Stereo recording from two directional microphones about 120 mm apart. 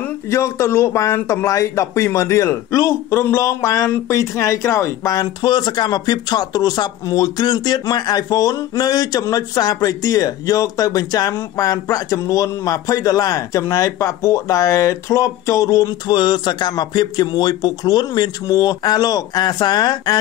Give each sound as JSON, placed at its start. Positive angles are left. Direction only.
{"t": 0.3, "sound": "speech", "side_deg": 25}